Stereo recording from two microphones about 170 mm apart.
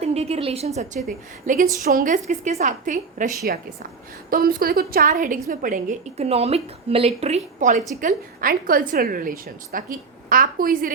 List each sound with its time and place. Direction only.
0.0 s a woman's voice: 40° right (ahead or behind)
1.0 s a woman's voice: 55° right (ahead or behind)
8.0 s a woman's voice: 55° right (ahead or behind)